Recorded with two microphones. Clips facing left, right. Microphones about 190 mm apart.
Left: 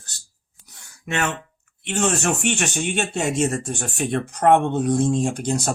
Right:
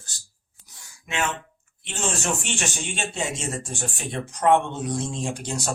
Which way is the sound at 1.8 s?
65° left (ahead or behind).